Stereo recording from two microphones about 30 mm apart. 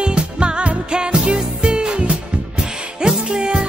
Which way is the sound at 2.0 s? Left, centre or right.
Right.